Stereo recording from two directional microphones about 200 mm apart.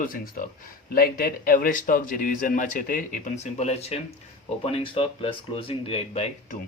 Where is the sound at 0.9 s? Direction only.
45° left (ahead or behind); by 6.6 s 30° left (ahead or behind).